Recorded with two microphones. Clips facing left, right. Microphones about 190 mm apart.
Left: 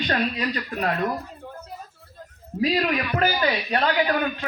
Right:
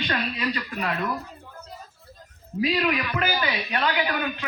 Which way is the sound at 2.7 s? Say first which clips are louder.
Left 1 dB; 40° left (ahead or behind).